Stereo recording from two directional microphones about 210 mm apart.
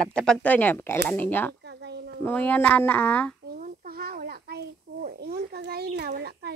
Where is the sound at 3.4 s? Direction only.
45° right (ahead or behind).